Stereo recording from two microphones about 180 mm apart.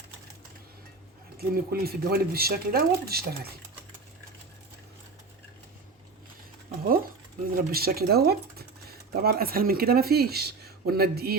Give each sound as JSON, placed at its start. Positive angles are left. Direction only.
{"t": 1.4, "sound": "speech", "side_deg": -60}
{"t": 7.5, "sound": "speech", "side_deg": -55}